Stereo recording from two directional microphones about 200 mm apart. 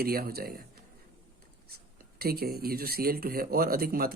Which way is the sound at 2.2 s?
50° right (ahead or behind).